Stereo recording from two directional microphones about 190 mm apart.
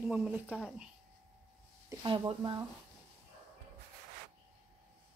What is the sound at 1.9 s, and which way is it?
Speech, 25° right (ahead or behind).